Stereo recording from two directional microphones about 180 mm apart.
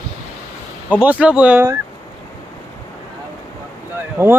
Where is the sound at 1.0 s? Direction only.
5° right (ahead or behind).